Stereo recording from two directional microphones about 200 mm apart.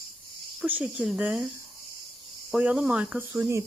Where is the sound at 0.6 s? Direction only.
5° right (ahead or behind).